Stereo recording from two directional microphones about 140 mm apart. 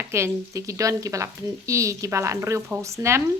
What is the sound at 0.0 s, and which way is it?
Speech, 20° right (ahead or behind).